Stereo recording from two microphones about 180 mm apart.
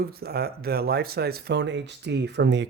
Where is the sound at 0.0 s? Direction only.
60° right (ahead or behind).